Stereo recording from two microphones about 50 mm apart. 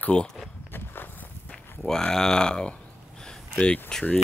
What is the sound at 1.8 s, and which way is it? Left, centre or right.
Speech, centre.